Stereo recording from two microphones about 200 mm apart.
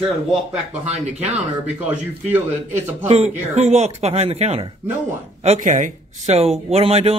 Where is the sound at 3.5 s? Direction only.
35° right (ahead or behind).